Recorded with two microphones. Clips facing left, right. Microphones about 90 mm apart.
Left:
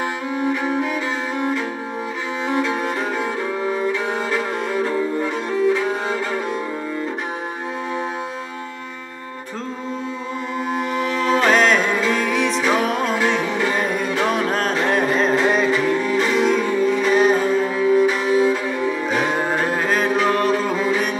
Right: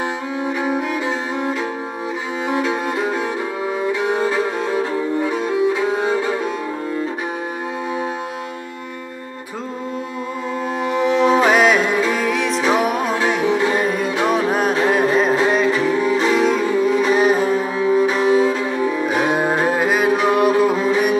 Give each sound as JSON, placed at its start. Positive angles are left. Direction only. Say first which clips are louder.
{"t": 0.5, "sound": "music", "louder": "right 1 dB", "side_deg": -5}
{"t": 2.4, "sound": "music", "louder": "right 1 dB", "side_deg": -10}
{"t": 10.7, "sound": "music", "louder": "right 1 dB", "side_deg": 0}
{"t": 11.1, "sound": "music", "louder": "right 8 dB", "side_deg": -20}
{"t": 11.3, "sound": "music", "louder": "right 2 dB", "side_deg": -10}
{"t": 17.9, "sound": "cello", "louder": "even", "side_deg": -5}
{"t": 18.2, "sound": "cello", "louder": "right 2 dB", "side_deg": -30}
{"t": 19.0, "sound": "music", "louder": "right 3 dB", "side_deg": -10}